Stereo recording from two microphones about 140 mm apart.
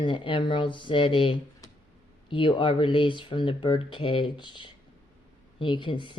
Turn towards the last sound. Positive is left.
turn(degrees=35)  # may be behind; listen again after turning